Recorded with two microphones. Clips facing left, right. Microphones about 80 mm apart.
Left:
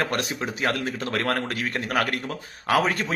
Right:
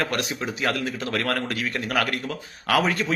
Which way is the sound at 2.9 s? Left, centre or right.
Left.